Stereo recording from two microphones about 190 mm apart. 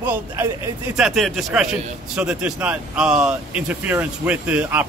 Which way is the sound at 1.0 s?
Centre (ahead or behind).